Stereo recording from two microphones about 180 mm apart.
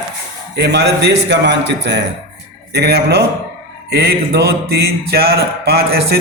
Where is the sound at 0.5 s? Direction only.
65° right (ahead or behind).